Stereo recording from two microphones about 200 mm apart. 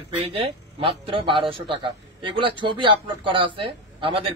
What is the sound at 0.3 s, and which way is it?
A man's voice, 30° right (ahead or behind).